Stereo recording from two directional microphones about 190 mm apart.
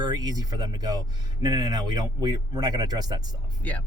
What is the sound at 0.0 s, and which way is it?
Speech, 20° right (ahead or behind).